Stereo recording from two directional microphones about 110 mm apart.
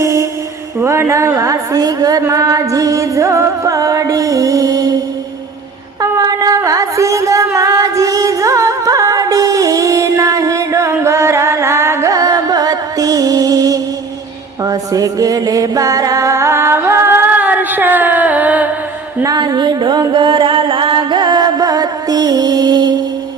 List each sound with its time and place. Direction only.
0.0 s music: 25° right (ahead or behind)
0.8 s a woman's voice: 25° right (ahead or behind)
6.0 s music: 35° right (ahead or behind); by 18.7 s 15° right (ahead or behind)
19.2 s music: 35° right (ahead or behind)